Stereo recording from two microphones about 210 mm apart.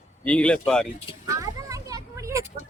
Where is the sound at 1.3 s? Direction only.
15° right (ahead or behind).